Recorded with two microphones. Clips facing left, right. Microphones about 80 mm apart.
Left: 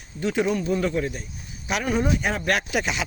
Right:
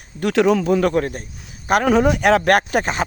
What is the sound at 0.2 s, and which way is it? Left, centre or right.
Speech, right.